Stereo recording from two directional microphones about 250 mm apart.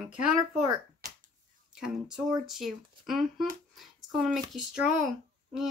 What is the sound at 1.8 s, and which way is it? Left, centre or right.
Speech, centre.